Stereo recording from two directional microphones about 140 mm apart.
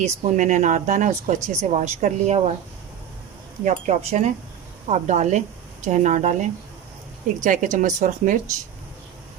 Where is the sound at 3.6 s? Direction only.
55° right (ahead or behind).